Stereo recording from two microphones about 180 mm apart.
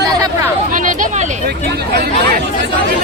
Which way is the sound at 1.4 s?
60° right (ahead or behind).